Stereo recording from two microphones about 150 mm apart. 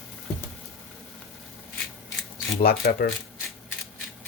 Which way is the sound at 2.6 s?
85° left.